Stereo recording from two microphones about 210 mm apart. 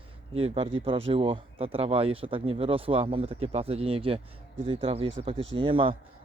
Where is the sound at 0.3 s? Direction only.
30° right (ahead or behind).